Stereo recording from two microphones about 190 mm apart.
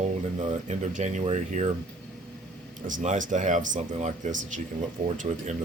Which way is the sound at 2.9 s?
45° right (ahead or behind).